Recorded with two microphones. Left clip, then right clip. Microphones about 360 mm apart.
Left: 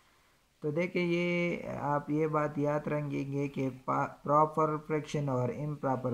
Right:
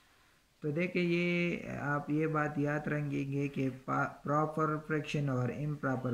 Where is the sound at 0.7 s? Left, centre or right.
Centre.